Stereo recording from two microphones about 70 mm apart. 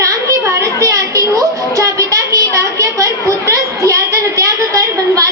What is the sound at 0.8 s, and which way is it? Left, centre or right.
Child singing, right.